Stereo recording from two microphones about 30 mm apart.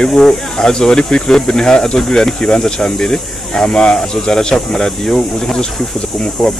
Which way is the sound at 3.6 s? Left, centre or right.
Left.